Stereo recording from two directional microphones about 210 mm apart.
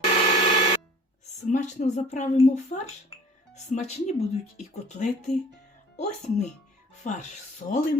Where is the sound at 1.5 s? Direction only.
35° left (ahead or behind).